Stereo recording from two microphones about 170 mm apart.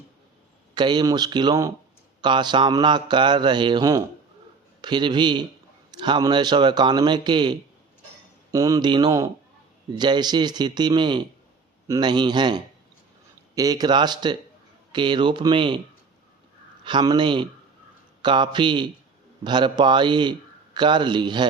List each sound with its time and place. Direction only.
0.7 s mantra: 25° right (ahead or behind)
8.5 s mantra: 20° right (ahead or behind)
16.8 s mantra: 25° right (ahead or behind)